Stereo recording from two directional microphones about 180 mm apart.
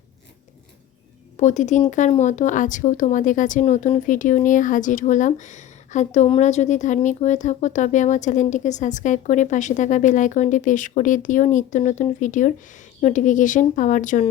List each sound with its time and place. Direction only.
1.4 s speech: 40° left (ahead or behind)